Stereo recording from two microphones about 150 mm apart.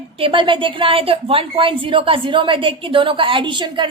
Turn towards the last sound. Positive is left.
turn(degrees=-30)  # may be behind; listen again after turning